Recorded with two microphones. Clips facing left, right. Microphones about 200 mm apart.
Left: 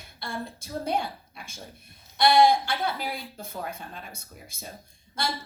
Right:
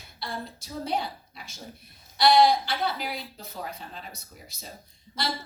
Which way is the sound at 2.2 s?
50° left (ahead or behind).